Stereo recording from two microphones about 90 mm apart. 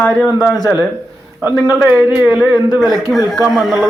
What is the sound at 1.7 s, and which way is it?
A man's voice, 10° right (ahead or behind).